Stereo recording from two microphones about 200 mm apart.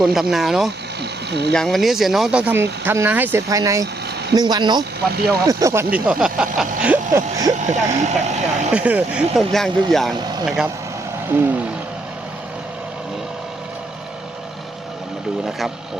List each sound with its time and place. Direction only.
0.0 s speech: centre (ahead or behind)
1.3 s speech: 55° right (ahead or behind)
1.5 s speech: centre (ahead or behind)
6.8 s a sound: 10° right (ahead or behind)
7.5 s speech: 35° right (ahead or behind)
8.7 s speech: 5° right (ahead or behind)
15.4 s speech: centre (ahead or behind)